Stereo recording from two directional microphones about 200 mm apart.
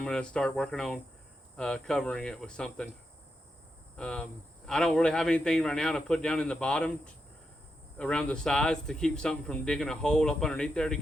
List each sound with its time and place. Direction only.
0.0 s speech: 5° left (ahead or behind)
3.9 s speech: 5° left (ahead or behind)